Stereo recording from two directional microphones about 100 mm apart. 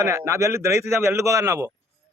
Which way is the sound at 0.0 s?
30° right (ahead or behind).